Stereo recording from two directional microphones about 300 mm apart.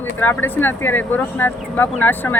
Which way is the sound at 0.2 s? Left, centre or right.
Centre.